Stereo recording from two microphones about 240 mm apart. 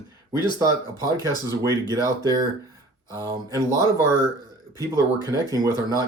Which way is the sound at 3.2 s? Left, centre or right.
Centre.